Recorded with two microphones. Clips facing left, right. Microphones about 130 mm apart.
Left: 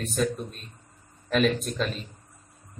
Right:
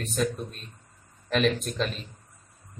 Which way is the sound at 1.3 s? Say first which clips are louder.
Left 1 dB; centre (ahead or behind).